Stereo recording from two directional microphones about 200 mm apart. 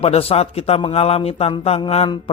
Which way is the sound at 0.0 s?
30° left (ahead or behind).